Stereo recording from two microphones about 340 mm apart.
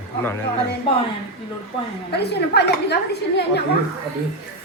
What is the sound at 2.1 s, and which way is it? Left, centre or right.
A woman's voice, left.